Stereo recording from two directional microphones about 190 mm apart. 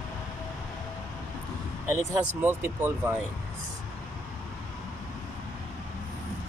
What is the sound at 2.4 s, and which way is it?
Speech, 10° right (ahead or behind).